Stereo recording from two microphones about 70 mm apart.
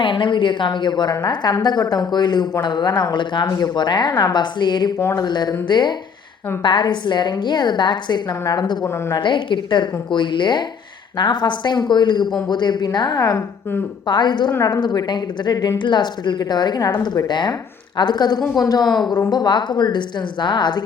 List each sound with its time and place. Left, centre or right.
0.4 s a woman's voice: left
4.9 s speech: left
5.2 s a woman's voice: left
14.6 s a woman's voice: left
18.9 s a woman's voice: left